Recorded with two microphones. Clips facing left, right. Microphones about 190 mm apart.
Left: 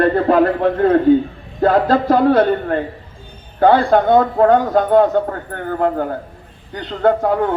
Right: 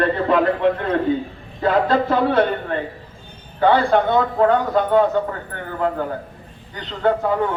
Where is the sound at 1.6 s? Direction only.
45° left (ahead or behind).